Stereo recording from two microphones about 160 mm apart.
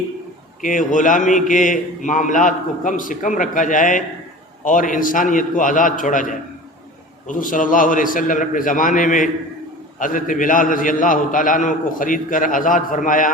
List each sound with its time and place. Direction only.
0.6 s a man's voice: 55° left (ahead or behind)